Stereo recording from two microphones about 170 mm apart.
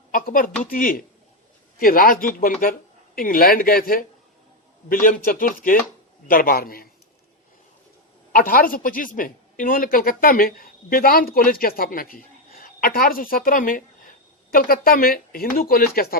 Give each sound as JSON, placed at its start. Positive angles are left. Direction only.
{"t": 0.1, "sound": "a woman's voice", "side_deg": 55}
{"t": 5.0, "sound": "a woman's voice", "side_deg": 55}
{"t": 8.3, "sound": "a woman's voice", "side_deg": 55}